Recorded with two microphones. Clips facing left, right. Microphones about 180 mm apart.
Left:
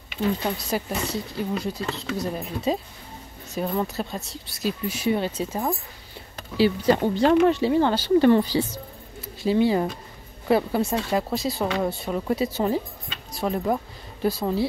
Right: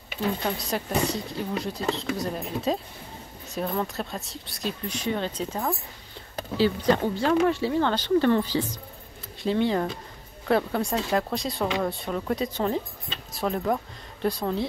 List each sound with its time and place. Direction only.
0.6 s speech: centre (ahead or behind)